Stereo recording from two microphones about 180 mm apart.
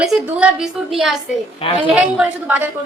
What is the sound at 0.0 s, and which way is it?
A woman's voice, 5° right (ahead or behind).